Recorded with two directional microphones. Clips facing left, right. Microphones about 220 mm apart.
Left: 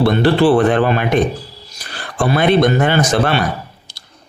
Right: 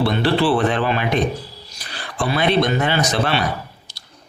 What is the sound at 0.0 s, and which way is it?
Speech, 50° left (ahead or behind).